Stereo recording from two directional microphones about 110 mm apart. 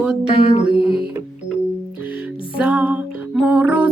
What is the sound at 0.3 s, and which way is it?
Speech, 65° left (ahead or behind).